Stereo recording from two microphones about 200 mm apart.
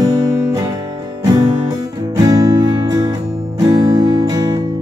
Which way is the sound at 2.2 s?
20° right (ahead or behind).